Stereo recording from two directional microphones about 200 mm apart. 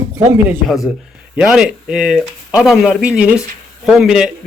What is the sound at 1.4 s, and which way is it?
Speech, 5° right (ahead or behind).